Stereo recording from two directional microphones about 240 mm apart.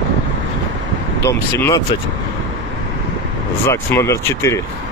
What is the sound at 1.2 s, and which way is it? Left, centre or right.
Speech, centre.